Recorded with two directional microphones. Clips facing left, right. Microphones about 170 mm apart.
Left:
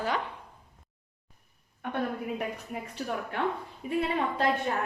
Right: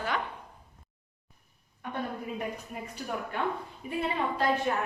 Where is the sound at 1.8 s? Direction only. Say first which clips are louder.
Left 3 dB; 60° left (ahead or behind).